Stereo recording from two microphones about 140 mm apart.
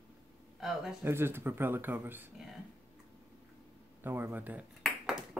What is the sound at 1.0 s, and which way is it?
Speech, 15° right (ahead or behind).